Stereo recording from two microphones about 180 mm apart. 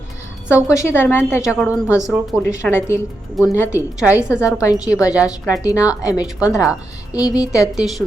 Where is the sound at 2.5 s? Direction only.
15° left (ahead or behind).